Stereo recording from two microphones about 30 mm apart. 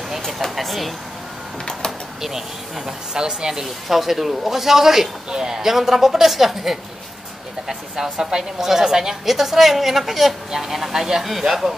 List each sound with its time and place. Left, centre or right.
0.6 s a sound: centre
3.2 s speech: right
3.6 s a woman's voice: centre